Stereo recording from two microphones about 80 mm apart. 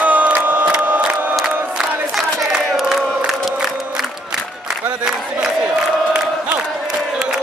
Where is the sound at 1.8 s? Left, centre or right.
Centre.